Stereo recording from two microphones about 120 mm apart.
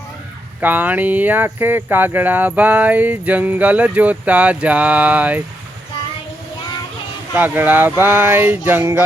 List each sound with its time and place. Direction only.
0.6 s speech: 15° right (ahead or behind)
7.3 s speech: 15° right (ahead or behind)